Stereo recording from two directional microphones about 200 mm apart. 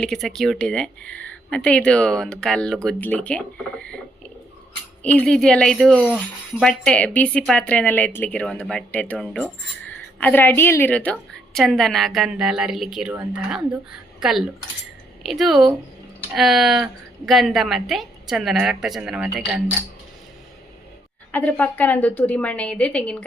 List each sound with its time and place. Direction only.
0.0 s speech: centre (ahead or behind)
5.1 s a woman's voice: 5° left (ahead or behind)
21.3 s a woman's voice: 10° left (ahead or behind)